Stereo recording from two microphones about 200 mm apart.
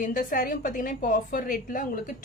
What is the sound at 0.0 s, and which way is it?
A woman's voice, 45° left (ahead or behind).